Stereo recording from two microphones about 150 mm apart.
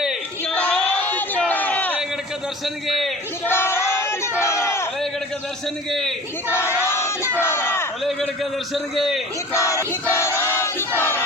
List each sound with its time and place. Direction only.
0.0 s a sound: 5° right (ahead or behind)
2.8 s a man's voice: centre (ahead or behind)
3.4 s crowd: 15° left (ahead or behind)
5.9 s a man's voice: 5° left (ahead or behind)
6.5 s crowd: 15° left (ahead or behind)
7.3 s a sound: 15° left (ahead or behind)
8.7 s a man's voice: centre (ahead or behind)
9.5 s battle cry: 20° left (ahead or behind)